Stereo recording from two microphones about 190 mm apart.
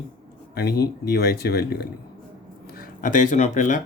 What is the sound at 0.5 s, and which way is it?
Speech, 55° left (ahead or behind).